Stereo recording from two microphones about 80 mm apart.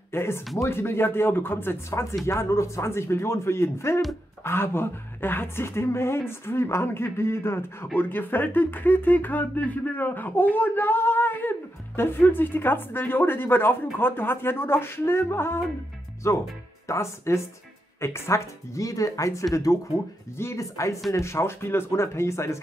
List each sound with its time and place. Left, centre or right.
0.1 s a woman's voice: left